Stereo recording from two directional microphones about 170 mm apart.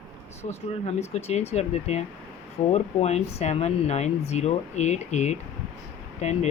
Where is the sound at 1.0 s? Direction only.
40° left (ahead or behind).